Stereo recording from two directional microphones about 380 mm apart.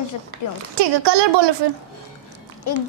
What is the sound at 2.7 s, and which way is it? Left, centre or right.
Speech, left.